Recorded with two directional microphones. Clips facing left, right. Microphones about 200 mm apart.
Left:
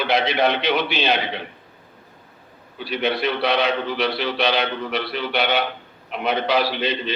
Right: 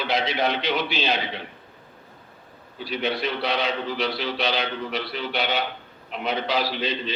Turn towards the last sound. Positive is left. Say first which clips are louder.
# left 4 dB
turn(degrees=65)  # may be behind; listen again after turning